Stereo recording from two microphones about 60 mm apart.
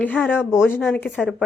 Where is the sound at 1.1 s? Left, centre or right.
Centre.